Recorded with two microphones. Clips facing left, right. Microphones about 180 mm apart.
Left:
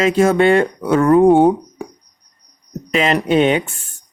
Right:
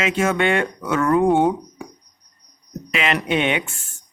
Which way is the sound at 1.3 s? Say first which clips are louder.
Left 6 dB; 35° left (ahead or behind).